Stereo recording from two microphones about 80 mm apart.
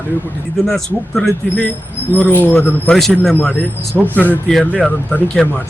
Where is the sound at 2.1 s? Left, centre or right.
Left.